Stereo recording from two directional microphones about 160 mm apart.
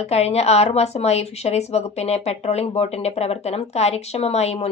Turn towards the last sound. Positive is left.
turn(degrees=40)  # may be behind; listen again after turning